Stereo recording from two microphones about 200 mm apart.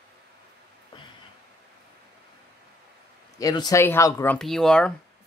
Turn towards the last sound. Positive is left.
turn(degrees=5)  # may be behind; listen again after turning